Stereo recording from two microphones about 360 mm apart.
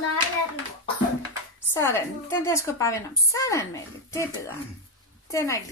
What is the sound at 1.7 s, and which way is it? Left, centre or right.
A woman's voice, centre.